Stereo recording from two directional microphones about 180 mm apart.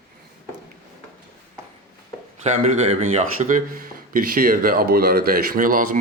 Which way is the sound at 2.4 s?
40° right (ahead or behind).